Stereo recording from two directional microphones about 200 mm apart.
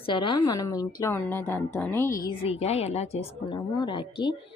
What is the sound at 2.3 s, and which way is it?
A woman's voice, 30° left (ahead or behind).